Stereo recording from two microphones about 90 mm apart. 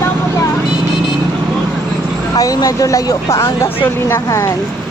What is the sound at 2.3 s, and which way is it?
Speech, 40° left (ahead or behind).